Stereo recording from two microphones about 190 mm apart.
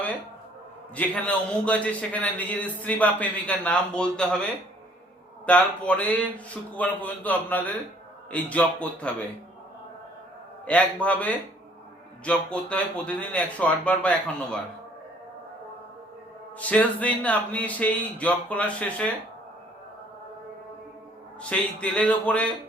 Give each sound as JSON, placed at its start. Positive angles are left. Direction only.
{"t": 0.9, "sound": "a man's voice", "side_deg": 5}
{"t": 5.5, "sound": "a man's voice", "side_deg": 5}
{"t": 10.7, "sound": "a man's voice", "side_deg": 5}
{"t": 16.6, "sound": "a man's voice", "side_deg": 5}
{"t": 21.5, "sound": "a man's voice", "side_deg": 5}